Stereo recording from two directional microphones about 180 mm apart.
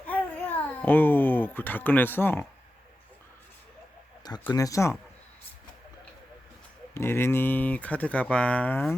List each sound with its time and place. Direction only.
0.1 s babbling: 10° left (ahead or behind)
4.4 s speech: 20° left (ahead or behind)
6.9 s speech: 15° left (ahead or behind)